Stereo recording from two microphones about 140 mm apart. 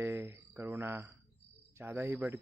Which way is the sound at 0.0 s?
15° right (ahead or behind).